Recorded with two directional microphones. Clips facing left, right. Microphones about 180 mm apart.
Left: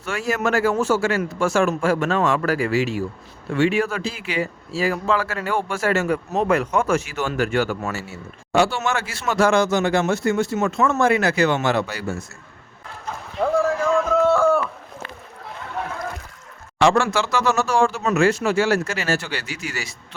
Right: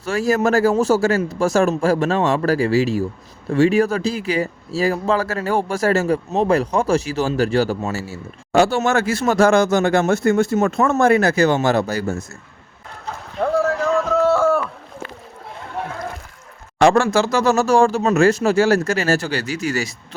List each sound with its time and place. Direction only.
0.0 s a man's voice: 35° right (ahead or behind)
13.6 s music: centre (ahead or behind)
16.8 s speech: 40° right (ahead or behind)